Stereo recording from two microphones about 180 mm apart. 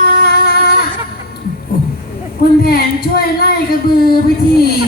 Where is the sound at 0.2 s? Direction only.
60° left (ahead or behind).